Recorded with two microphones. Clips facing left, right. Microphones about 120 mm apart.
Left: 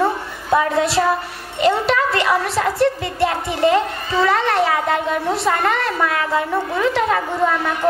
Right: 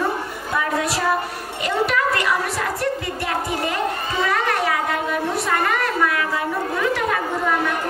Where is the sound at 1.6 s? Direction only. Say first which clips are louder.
Left 4 dB; 25° left (ahead or behind).